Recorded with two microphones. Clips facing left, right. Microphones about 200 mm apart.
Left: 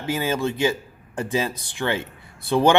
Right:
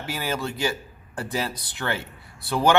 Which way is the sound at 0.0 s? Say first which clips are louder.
Left 5 dB; 20° left (ahead or behind).